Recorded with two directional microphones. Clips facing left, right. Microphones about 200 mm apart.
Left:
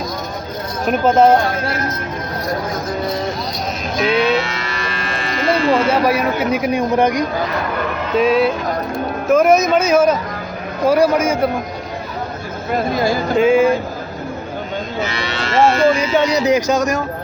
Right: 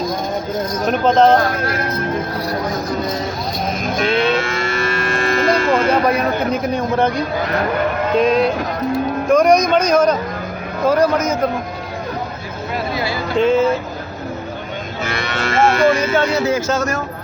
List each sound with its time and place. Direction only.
0.9 s a man's voice: 10° left (ahead or behind)
3.9 s cattle: 50° right (ahead or behind)
5.9 s a man's voice: 5° left (ahead or behind)
8.2 s a man's voice: 5° left (ahead or behind)
12.7 s speech: 45° left (ahead or behind)
13.4 s a man's voice: 10° left (ahead or behind)
15.0 s cattle: 50° right (ahead or behind)
16.1 s a man's voice: 15° left (ahead or behind)